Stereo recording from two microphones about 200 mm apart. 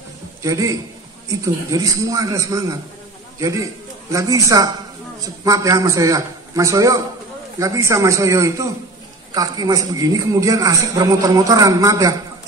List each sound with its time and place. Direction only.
0.4 s a man's voice: 15° right (ahead or behind)